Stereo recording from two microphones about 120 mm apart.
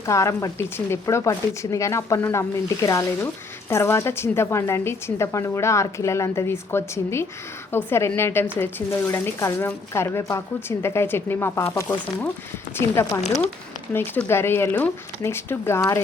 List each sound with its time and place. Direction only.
0.0 s a woman's voice: 25° left (ahead or behind)
14.3 s a woman's voice: 20° left (ahead or behind)